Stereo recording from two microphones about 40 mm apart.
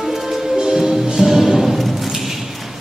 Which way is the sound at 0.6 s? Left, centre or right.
Centre.